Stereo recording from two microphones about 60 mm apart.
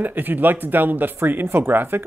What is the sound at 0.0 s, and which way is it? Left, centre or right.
Speech, right.